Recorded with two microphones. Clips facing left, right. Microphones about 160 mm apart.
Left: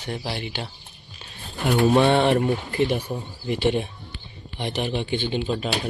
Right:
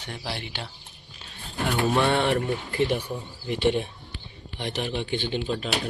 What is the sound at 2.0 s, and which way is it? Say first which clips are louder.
Speech: left 4 dB; 25° left (ahead or behind).